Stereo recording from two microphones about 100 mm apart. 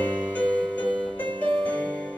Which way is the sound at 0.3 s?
15° left (ahead or behind).